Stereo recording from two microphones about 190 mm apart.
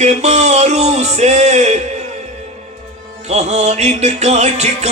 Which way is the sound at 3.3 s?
35° right (ahead or behind).